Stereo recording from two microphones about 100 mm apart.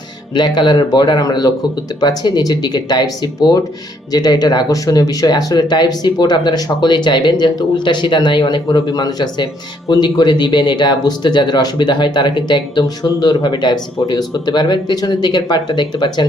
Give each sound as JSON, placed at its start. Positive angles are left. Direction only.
{"t": 0.3, "sound": "speech", "side_deg": 50}